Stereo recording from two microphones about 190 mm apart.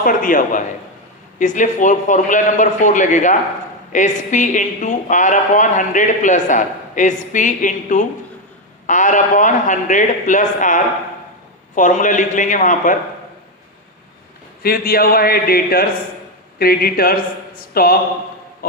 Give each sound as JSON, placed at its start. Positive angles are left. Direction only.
{"t": 0.0, "sound": "a man's voice", "side_deg": 45}
{"t": 14.6, "sound": "a man's voice", "side_deg": 50}